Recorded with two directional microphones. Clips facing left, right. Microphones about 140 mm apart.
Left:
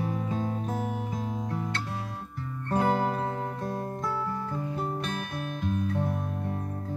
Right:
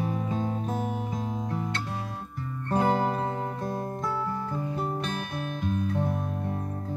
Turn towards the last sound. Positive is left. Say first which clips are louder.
# right 1 dB
turn(degrees=-20)  # may be behind; listen again after turning